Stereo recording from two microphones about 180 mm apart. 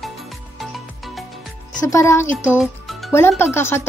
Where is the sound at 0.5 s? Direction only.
Centre (ahead or behind).